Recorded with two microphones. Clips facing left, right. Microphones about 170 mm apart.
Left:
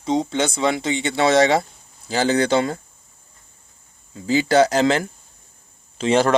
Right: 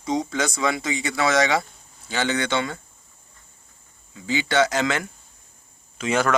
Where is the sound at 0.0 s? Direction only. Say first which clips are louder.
Left 4 dB; 25° left (ahead or behind).